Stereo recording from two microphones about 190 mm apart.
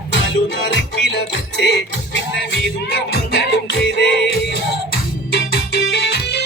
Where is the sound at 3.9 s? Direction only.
60° left (ahead or behind).